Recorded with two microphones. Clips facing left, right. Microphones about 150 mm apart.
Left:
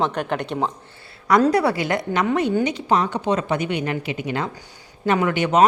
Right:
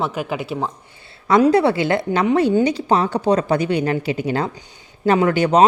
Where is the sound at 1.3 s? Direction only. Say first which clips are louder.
Right 3 dB; 25° right (ahead or behind).